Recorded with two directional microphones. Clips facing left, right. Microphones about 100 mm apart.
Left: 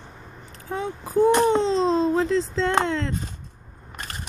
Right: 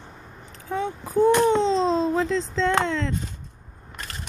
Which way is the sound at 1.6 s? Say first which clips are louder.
Even; 5° left (ahead or behind).